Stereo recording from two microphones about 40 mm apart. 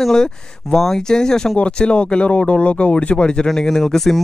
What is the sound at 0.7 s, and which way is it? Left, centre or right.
Speech, centre.